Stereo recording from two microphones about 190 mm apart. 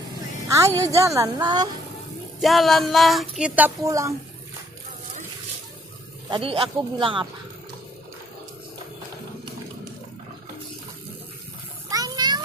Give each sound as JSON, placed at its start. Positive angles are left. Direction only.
{"t": 0.5, "sound": "a woman's voice", "side_deg": -15}
{"t": 2.4, "sound": "speech", "side_deg": 0}
{"t": 6.3, "sound": "speech", "side_deg": -30}
{"t": 11.9, "sound": "a sound", "side_deg": -20}